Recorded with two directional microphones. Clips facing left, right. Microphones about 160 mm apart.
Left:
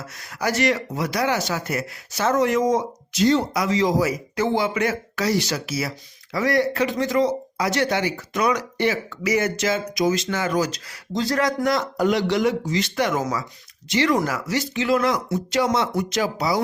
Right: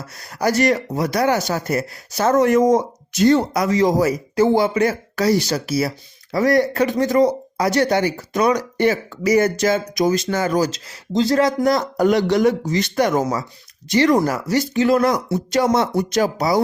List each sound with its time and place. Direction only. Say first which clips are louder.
0.2 s speech: right 5 dB; 35° right (ahead or behind)